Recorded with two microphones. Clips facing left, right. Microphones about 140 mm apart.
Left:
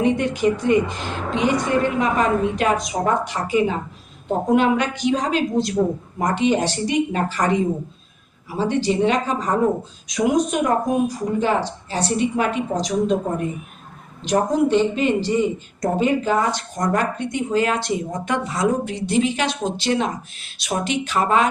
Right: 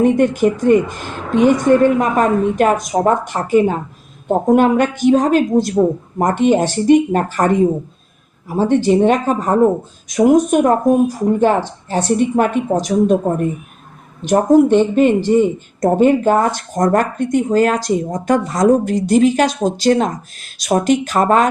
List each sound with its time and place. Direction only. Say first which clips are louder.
0.0 s speech: right 6 dB; 50° right (ahead or behind)
14.2 s speech: right 8 dB; 50° right (ahead or behind)